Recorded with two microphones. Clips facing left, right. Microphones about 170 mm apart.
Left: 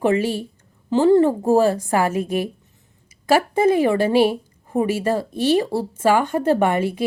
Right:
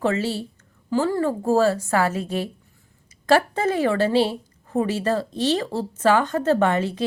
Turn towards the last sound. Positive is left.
turn(degrees=10)  # may be behind; listen again after turning